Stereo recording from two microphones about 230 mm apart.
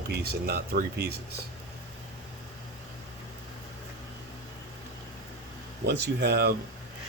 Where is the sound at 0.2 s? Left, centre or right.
Right.